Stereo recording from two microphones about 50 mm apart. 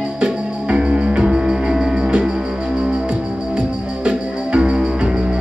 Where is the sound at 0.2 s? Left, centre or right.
Right.